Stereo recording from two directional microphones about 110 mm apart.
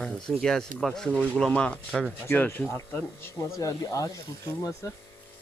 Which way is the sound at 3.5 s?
30° left (ahead or behind).